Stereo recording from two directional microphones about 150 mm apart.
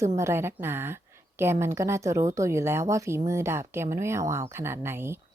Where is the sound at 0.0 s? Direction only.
20° right (ahead or behind).